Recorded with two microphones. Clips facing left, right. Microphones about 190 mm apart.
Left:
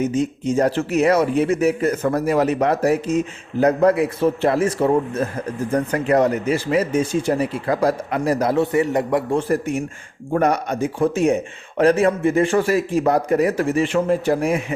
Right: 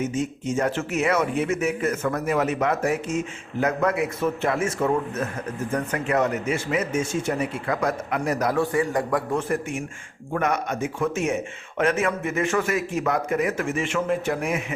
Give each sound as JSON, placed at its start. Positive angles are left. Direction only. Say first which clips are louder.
{"t": 0.0, "sound": "a man's voice", "louder": "left 6 dB", "side_deg": 35}
{"t": 9.5, "sound": "a man's voice", "louder": "left 6 dB", "side_deg": 35}